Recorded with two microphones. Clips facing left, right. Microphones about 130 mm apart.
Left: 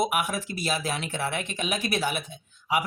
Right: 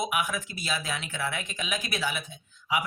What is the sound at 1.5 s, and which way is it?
Speech, 60° left (ahead or behind).